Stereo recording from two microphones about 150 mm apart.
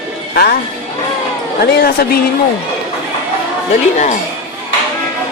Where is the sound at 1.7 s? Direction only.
90° left.